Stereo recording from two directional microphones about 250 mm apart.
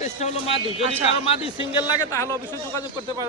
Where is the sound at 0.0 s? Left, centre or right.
Left.